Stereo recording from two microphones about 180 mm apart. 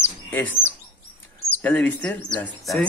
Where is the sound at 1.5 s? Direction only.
5° left (ahead or behind).